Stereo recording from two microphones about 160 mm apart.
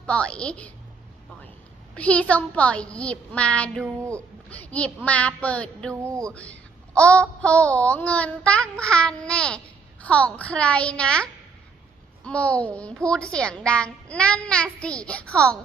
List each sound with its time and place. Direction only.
0.0 s a child's voice: 5° left (ahead or behind)
2.0 s a child's voice: 10° left (ahead or behind)
5.9 s music: 20° right (ahead or behind)
6.2 s a child's voice: 5° left (ahead or behind)